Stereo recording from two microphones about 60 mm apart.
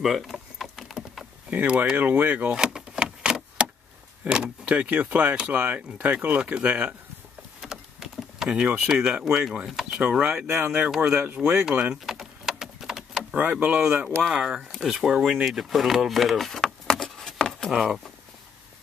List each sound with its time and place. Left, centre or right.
0.0 s a sound: centre
1.5 s speech: right
2.5 s vehicle: centre
4.3 s speech: centre
7.6 s power windows: centre
8.5 s speech: centre
10.0 s speech: centre
11.4 s speech: centre
11.9 s a sound: centre
13.3 s speech: right
14.0 s speech: centre
15.5 s speech: centre
16.8 s keys jangling: centre
17.6 s speech: centre